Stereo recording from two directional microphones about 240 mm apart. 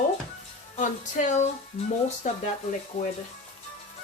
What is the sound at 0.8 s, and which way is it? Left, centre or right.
Speech, left.